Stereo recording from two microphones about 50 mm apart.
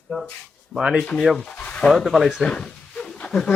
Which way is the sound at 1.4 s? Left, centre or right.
Left.